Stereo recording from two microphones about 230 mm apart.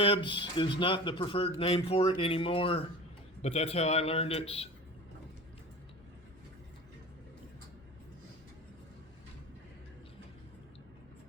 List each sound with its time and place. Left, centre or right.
0.0 s speech: left